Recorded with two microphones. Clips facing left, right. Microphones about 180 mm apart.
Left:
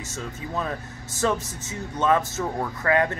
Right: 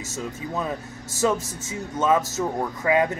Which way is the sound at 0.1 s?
10° right (ahead or behind).